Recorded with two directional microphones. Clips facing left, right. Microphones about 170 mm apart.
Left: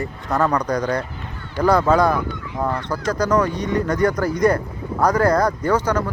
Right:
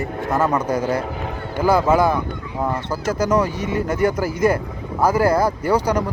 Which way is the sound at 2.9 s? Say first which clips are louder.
Even; 5° right (ahead or behind).